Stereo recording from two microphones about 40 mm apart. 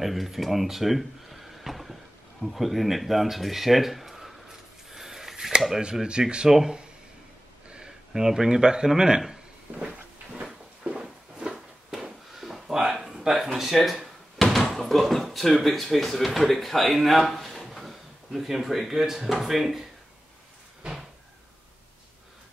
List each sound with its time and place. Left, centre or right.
0.0 s speech: centre
4.9 s a sound: centre
6.0 s speech: right
9.7 s cupboard open or close: right
10.3 s a sound: right
11.5 s a sound: centre
14.4 s door: centre
14.7 s speech: centre
20.8 s cupboard open or close: right